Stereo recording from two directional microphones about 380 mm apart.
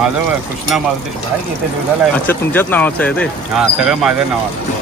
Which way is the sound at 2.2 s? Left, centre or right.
Centre.